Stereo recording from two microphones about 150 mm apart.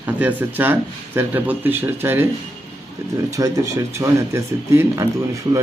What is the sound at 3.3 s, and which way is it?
Speech, 20° right (ahead or behind).